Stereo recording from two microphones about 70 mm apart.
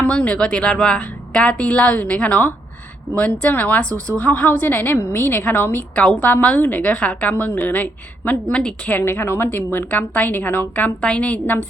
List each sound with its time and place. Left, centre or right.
0.0 s a woman's voice: centre
5.9 s a woman's voice: centre
8.9 s a woman's voice: left